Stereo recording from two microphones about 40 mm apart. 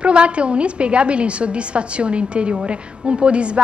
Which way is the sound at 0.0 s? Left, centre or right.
Right.